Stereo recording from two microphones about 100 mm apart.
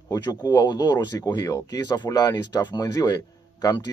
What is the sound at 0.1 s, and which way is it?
Speech, 40° left (ahead or behind).